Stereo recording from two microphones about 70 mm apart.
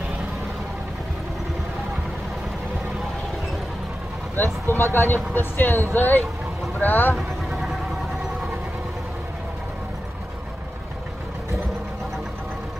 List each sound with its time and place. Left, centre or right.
4.4 s speech: left
7.2 s vehicle: centre